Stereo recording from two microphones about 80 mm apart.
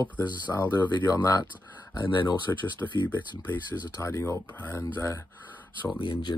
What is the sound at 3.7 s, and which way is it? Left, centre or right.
Speech, left.